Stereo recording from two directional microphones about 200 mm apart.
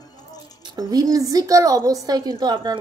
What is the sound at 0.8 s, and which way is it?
Speech, 20° right (ahead or behind).